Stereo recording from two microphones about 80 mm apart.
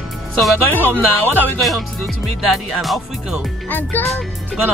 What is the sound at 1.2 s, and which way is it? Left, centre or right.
Speech, left.